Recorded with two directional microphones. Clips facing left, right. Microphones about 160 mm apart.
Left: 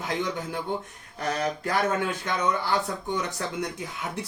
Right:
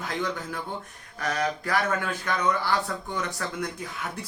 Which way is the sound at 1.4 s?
25° left (ahead or behind).